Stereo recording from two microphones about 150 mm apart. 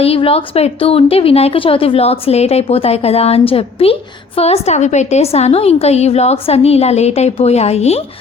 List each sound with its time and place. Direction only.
0.0 s a woman's voice: 40° left (ahead or behind)